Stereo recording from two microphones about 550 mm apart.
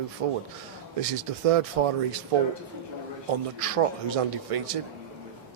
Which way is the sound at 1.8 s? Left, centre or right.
Right.